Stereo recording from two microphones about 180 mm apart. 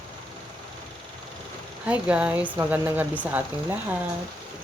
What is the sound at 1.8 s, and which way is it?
Speech, 5° right (ahead or behind).